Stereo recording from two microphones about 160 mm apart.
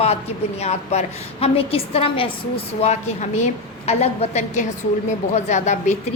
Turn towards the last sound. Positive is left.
turn(degrees=45)  # may be behind; listen again after turning